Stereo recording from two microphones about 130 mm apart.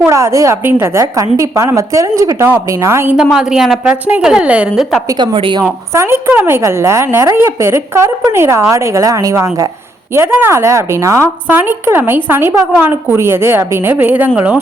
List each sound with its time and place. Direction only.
0.0 s a woman's voice: 20° right (ahead or behind)
3.2 s a woman's voice: 5° right (ahead or behind)
5.2 s a woman's voice: 40° right (ahead or behind)
5.9 s a woman's voice: 20° right (ahead or behind)